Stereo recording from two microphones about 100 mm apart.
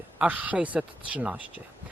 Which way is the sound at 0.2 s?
15° right (ahead or behind).